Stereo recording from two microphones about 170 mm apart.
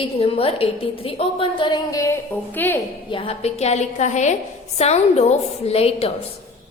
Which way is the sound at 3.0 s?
30° left (ahead or behind).